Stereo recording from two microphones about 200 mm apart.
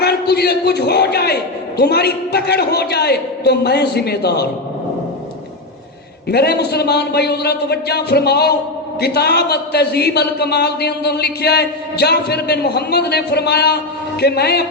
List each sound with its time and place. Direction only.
0.0 s a man's voice: 55° left (ahead or behind)
6.2 s a man's voice: 55° left (ahead or behind)